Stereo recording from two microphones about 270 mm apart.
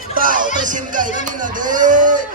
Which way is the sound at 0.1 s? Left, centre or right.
Right.